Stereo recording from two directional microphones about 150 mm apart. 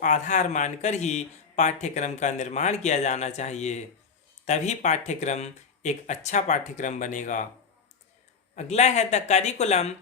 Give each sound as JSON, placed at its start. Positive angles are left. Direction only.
{"t": 0.0, "sound": "a man's voice", "side_deg": 55}
{"t": 8.5, "sound": "a man's voice", "side_deg": 50}